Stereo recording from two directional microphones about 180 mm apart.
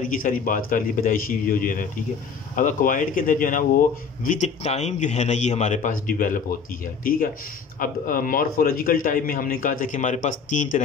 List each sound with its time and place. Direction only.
0.0 s a man's voice: 50° left (ahead or behind)
4.3 s a man's voice: 40° left (ahead or behind)